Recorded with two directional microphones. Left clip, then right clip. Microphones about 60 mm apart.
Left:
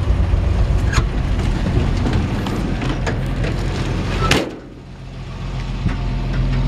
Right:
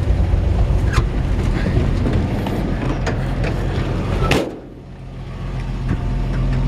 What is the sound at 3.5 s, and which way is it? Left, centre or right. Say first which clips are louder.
Vehicle: even; left.